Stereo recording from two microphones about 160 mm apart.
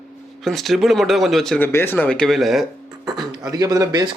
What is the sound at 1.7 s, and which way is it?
Speech, 15° left (ahead or behind).